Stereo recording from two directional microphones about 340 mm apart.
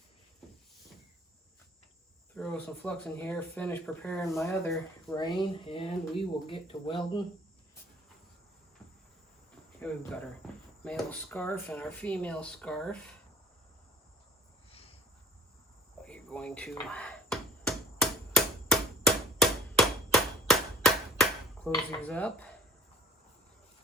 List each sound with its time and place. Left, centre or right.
2.3 s speech: centre
9.8 s speech: centre
14.7 s cricket: centre
16.0 s a sound: centre